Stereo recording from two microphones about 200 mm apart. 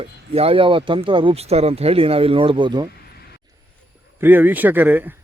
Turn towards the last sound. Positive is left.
turn(degrees=-10)  # may be behind; listen again after turning